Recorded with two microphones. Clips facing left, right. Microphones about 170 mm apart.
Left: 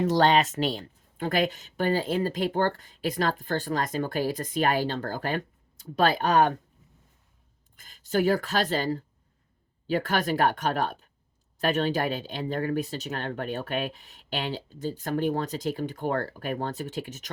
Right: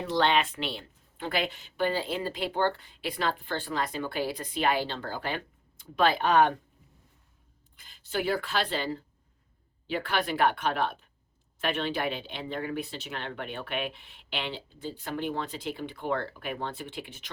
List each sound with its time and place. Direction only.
0.0 s speech: 45° left (ahead or behind)
7.8 s speech: 45° left (ahead or behind)